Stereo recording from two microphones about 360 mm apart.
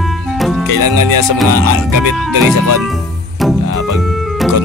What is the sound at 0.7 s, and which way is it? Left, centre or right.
Speech, right.